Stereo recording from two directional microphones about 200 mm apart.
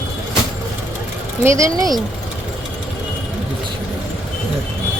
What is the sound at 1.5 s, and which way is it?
Speech, 15° right (ahead or behind).